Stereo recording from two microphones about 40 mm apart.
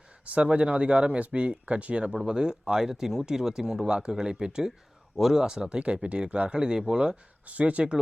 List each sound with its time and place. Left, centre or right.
0.3 s speech: right
2.2 s speech: centre
5.8 s speech: right; by 7.0 s centre
7.4 s speech: right